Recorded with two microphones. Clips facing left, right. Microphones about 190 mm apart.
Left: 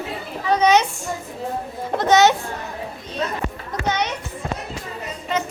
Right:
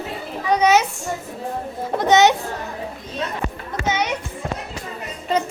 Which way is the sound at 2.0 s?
20° right (ahead or behind).